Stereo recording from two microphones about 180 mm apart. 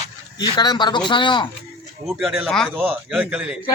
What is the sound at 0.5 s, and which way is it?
Speech, 25° left (ahead or behind).